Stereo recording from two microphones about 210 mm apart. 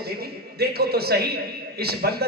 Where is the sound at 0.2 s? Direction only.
50° right (ahead or behind).